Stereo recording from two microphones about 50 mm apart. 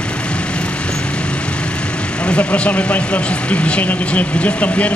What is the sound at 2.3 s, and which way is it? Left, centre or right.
Speech, left.